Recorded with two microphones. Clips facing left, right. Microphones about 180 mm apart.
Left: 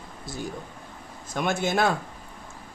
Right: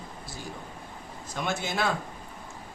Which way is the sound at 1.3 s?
50° left (ahead or behind).